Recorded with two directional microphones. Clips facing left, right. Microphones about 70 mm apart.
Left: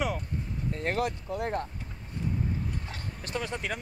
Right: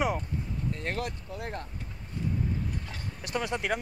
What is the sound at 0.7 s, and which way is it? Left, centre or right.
Speech, centre.